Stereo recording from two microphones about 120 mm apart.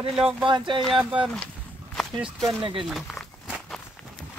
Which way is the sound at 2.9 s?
Centre (ahead or behind).